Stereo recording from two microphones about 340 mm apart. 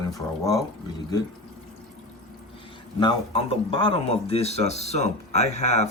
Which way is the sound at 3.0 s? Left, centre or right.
Centre.